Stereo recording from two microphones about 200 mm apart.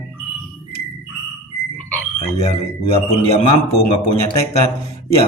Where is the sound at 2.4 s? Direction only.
30° left (ahead or behind).